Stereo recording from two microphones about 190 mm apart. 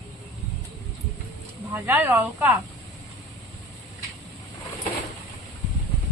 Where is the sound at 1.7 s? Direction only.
10° right (ahead or behind).